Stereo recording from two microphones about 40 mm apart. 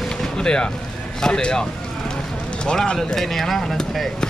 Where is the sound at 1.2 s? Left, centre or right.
Centre.